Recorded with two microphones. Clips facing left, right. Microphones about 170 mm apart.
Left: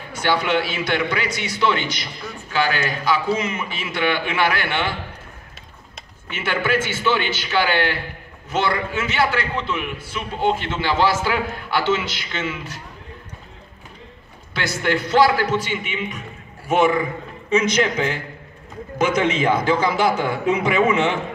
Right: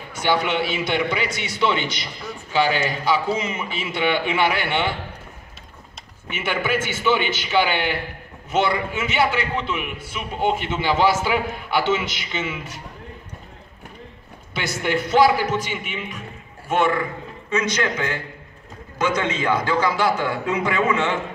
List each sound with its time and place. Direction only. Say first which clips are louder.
0.2 s a man's voice: left 1 dB; 20° right (ahead or behind)
6.3 s a man's voice: left 2 dB; 15° right (ahead or behind)
14.6 s a man's voice: left 1 dB; 20° right (ahead or behind)
15.7 s a man's voice: left 3 dB; centre (ahead or behind)
16.6 s a man's voice: left 3 dB; 10° left (ahead or behind)
17.5 s a man's voice: left 4 dB; 25° left (ahead or behind)